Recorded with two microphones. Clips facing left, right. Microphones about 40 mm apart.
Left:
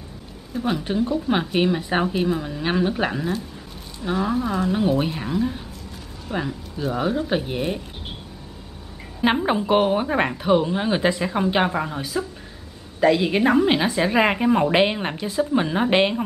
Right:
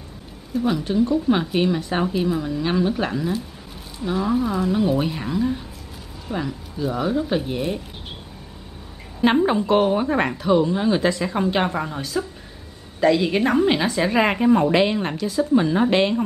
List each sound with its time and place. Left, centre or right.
0.6 s speech: centre
6.3 s speech: centre
6.9 s speech: centre
9.2 s speech: centre
14.7 s speech: left